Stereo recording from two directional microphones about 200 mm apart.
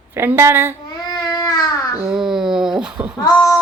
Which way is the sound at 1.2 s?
20° left (ahead or behind).